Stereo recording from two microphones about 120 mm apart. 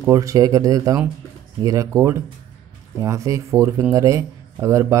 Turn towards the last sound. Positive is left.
turn(degrees=-25)  # may be behind; listen again after turning